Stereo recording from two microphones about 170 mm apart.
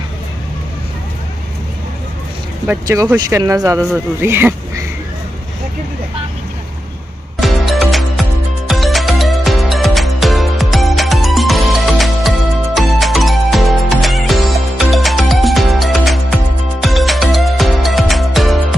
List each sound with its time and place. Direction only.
2.6 s speech: 15° right (ahead or behind)
7.3 s music: centre (ahead or behind)